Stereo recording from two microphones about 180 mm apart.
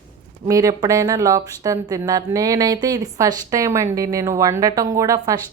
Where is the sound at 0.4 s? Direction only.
20° right (ahead or behind).